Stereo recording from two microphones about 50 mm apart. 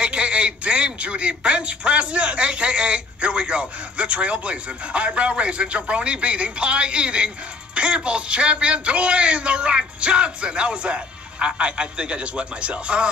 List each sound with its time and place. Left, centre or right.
0.0 s speech: right